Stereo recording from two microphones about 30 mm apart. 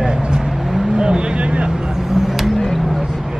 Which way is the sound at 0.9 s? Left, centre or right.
Right.